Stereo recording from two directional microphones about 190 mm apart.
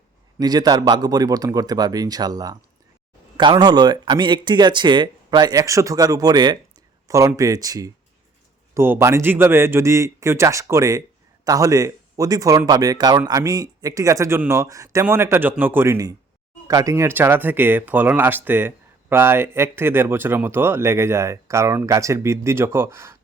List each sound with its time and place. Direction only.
0.3 s speech: 20° right (ahead or behind)